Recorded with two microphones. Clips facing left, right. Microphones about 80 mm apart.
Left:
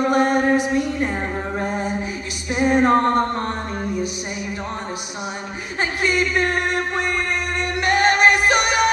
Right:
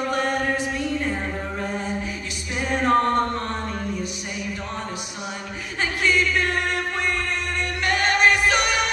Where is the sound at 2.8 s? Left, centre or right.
Left.